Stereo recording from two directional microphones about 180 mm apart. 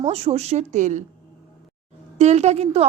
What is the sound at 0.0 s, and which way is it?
Speech, 35° right (ahead or behind).